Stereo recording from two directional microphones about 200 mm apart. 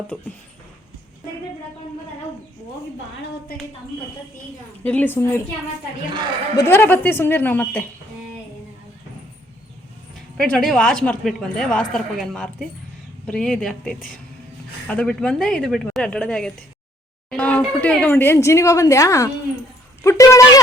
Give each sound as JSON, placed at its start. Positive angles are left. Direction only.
{"t": 0.1, "sound": "a woman's voice", "side_deg": 5}
{"t": 4.8, "sound": "speech", "side_deg": 10}
{"t": 6.6, "sound": "speech", "side_deg": 10}
{"t": 10.3, "sound": "a woman's voice", "side_deg": 5}